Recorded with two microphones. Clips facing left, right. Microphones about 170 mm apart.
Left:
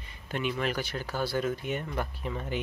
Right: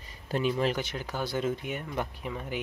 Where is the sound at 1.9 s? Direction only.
10° right (ahead or behind).